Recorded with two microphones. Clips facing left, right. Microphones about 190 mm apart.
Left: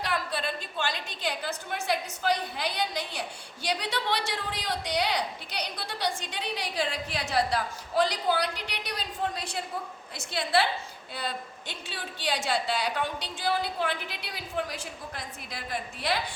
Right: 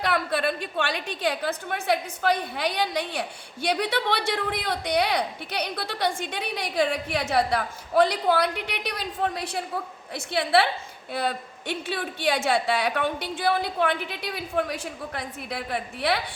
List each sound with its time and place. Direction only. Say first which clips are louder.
0.0 s a woman's voice: right 6 dB; 60° right (ahead or behind)